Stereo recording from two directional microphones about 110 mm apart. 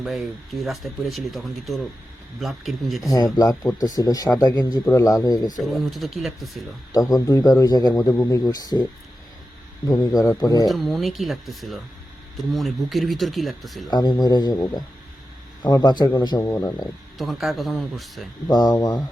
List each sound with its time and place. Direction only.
0.0 s speech: centre (ahead or behind)
3.6 s a man's voice: 35° left (ahead or behind)
5.6 s speech: centre (ahead or behind)
6.9 s a man's voice: 30° left (ahead or behind)
10.7 s speech: centre (ahead or behind)
13.9 s a man's voice: 40° left (ahead or behind)
15.6 s a man's voice: 40° left (ahead or behind)
17.2 s speech: centre (ahead or behind)
18.5 s a man's voice: 35° left (ahead or behind)